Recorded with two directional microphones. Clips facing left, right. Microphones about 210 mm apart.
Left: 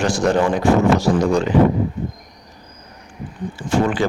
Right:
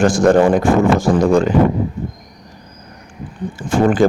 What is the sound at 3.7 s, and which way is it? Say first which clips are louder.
Speech: right 4 dB; 45° right (ahead or behind).